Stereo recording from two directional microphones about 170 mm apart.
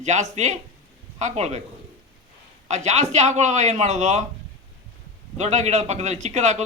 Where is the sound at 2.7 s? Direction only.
40° right (ahead or behind).